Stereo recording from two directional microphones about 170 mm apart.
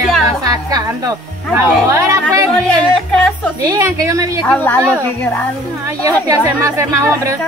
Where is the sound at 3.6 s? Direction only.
20° right (ahead or behind).